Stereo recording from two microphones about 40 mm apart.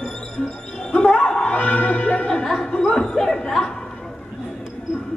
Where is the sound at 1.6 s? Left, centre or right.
Left.